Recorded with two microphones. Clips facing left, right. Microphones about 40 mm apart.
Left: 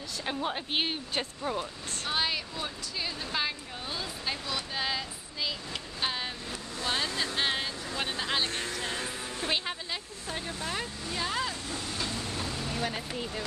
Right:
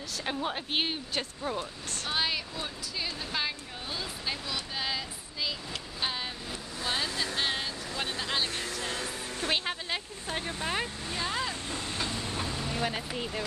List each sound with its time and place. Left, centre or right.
0.2 s speech: centre
8.8 s music: centre
10.3 s speech: right
11.6 s vehicle: right; by 13.5 s centre